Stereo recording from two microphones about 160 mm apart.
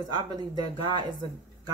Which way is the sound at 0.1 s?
25° right (ahead or behind).